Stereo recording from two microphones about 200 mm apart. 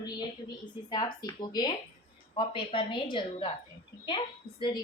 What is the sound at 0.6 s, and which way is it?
A woman's voice, 20° left (ahead or behind).